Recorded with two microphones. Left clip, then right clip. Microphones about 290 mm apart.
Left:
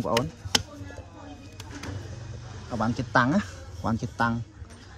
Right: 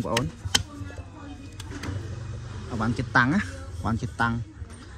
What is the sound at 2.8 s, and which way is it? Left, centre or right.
Speech, centre.